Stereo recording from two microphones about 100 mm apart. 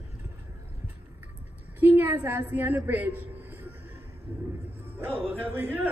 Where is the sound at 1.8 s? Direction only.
20° right (ahead or behind).